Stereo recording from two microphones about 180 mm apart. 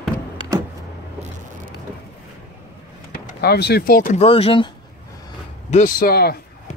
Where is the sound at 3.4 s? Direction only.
65° left (ahead or behind).